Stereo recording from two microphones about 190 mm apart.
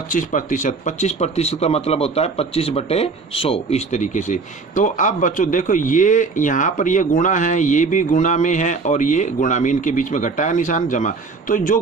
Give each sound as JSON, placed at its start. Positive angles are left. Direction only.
{"t": 0.1, "sound": "speech", "side_deg": 45}